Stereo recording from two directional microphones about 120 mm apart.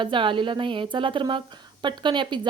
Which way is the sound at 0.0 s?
45° right (ahead or behind).